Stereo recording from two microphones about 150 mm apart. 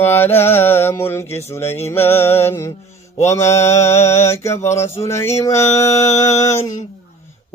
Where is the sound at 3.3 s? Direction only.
20° left (ahead or behind).